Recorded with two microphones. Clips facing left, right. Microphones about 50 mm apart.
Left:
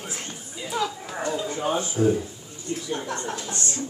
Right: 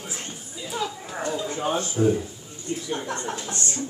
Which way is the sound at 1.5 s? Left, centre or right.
Centre.